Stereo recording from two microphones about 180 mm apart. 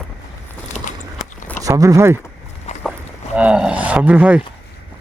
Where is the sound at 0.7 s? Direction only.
45° left (ahead or behind).